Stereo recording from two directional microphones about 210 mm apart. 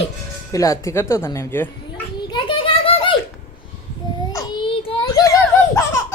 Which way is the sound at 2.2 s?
20° left (ahead or behind).